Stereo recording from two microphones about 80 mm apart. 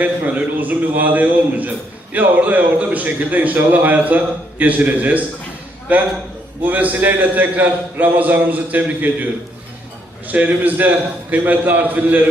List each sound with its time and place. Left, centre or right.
0.0 s a man's voice: right
10.2 s a man's voice: right